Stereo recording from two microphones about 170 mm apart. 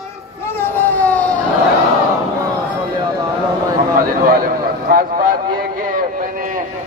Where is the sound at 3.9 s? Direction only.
60° right (ahead or behind).